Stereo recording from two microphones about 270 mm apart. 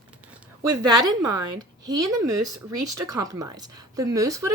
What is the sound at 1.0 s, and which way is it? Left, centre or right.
Speech, centre.